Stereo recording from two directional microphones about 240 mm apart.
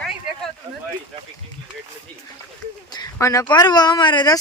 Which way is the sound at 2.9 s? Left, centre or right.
Centre.